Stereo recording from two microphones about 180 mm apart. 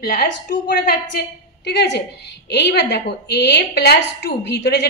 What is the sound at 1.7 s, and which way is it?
A woman's voice, 70° left (ahead or behind).